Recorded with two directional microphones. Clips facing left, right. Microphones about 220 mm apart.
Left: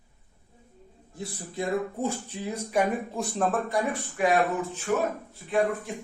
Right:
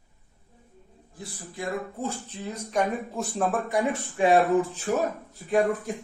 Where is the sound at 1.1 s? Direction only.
20° left (ahead or behind).